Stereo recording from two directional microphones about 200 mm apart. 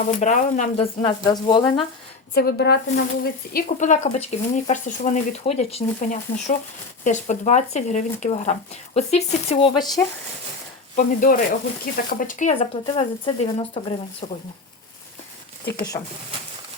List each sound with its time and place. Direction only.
0.0 s speech: 35° left (ahead or behind)
1.0 s speech: 20° left (ahead or behind)
2.3 s a woman's voice: 50° left (ahead or behind)
3.5 s speech: 40° left (ahead or behind); by 10.0 s 25° left (ahead or behind)
10.9 s a woman's voice: 45° left (ahead or behind)
15.9 s speech: 15° left (ahead or behind)